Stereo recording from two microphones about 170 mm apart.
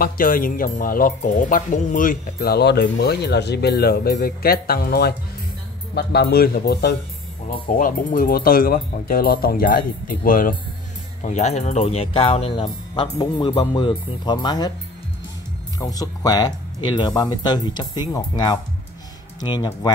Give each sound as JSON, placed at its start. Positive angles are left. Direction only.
{"t": 0.0, "sound": "speech", "side_deg": 55}
{"t": 7.7, "sound": "speech", "side_deg": 50}
{"t": 11.2, "sound": "speech", "side_deg": 40}
{"t": 15.8, "sound": "speech", "side_deg": 20}